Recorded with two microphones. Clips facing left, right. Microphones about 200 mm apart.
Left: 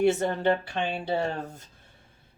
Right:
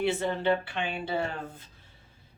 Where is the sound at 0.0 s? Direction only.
45° left (ahead or behind).